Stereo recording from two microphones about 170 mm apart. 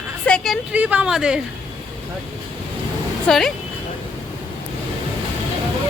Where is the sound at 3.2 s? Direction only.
Centre (ahead or behind).